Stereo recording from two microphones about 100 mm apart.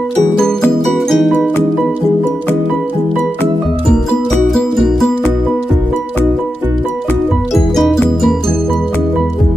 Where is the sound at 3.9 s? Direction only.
Centre (ahead or behind).